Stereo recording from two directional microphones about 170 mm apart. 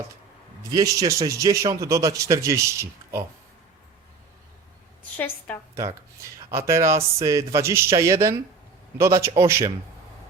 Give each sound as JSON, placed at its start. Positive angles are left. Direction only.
{"t": 0.6, "sound": "a man's voice", "side_deg": -20}
{"t": 5.1, "sound": "a woman's voice", "side_deg": 10}
{"t": 5.7, "sound": "a man's voice", "side_deg": -20}